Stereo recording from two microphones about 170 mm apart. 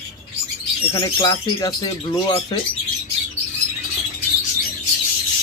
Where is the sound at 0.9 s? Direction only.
25° left (ahead or behind).